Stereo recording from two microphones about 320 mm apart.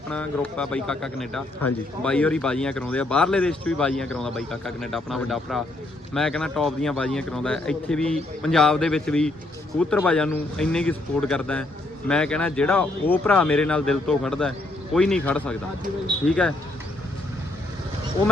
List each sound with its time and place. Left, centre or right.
0.1 s speech: centre